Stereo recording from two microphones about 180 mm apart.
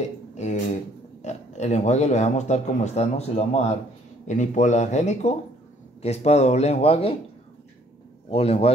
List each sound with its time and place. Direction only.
0.3 s a sound: 40° left (ahead or behind)
1.2 s speech: 40° left (ahead or behind)
8.3 s speech: 35° left (ahead or behind)